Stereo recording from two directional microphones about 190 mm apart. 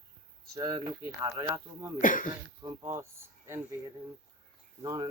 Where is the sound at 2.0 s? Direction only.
45° left (ahead or behind).